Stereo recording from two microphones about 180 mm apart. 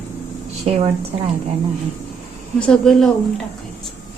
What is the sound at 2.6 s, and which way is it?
Speech, 5° left (ahead or behind).